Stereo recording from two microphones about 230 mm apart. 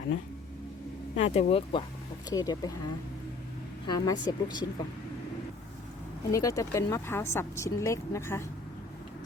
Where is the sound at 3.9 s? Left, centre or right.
Centre.